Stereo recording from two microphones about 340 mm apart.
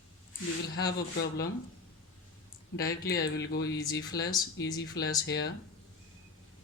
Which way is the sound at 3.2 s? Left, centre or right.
Left.